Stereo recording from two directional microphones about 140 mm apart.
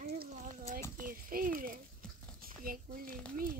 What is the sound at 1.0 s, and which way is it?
Speech, 85° right.